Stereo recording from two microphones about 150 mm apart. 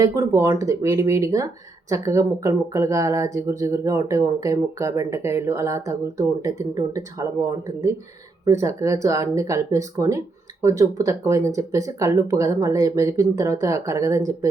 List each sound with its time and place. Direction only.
0.0 s speech: 25° right (ahead or behind)
8.4 s speech: 20° right (ahead or behind)